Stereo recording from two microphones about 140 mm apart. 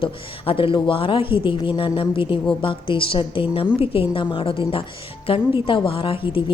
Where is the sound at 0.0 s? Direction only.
40° left (ahead or behind).